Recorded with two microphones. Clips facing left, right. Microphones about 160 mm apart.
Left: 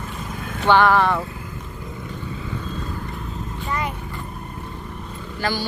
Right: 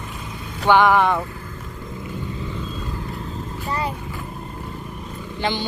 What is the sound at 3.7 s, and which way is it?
Dog, 35° right (ahead or behind).